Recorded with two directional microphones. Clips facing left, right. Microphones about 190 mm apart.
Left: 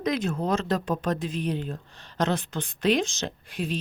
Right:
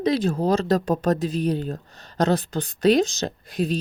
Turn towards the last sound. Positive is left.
turn(degrees=-40)  # may be behind; listen again after turning